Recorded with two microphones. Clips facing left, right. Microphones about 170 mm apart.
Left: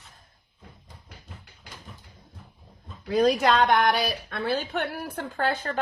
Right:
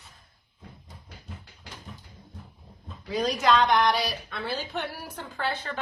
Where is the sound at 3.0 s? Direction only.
55° left (ahead or behind).